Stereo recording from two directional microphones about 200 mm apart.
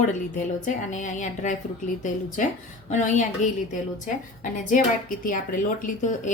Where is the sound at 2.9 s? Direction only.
35° left (ahead or behind).